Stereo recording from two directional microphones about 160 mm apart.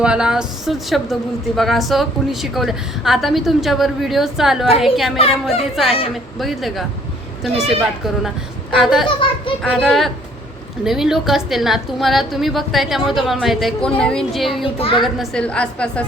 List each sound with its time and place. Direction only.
0.0 s a woman's voice: 5° right (ahead or behind)
5.1 s a child's voice: 35° left (ahead or behind)
5.7 s a woman's voice: centre (ahead or behind)
14.8 s a child's voice: 35° left (ahead or behind)
15.0 s a woman's voice: centre (ahead or behind)